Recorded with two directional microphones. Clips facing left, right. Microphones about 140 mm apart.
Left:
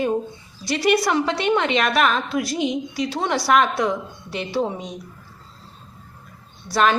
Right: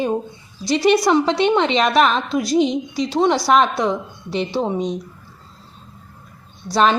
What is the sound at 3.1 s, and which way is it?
A woman's voice, 20° right (ahead or behind).